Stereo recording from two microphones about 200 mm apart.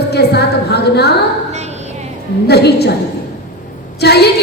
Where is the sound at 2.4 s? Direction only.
55° left (ahead or behind).